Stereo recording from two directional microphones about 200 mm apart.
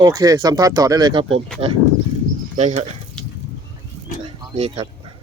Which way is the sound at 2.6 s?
35° right (ahead or behind).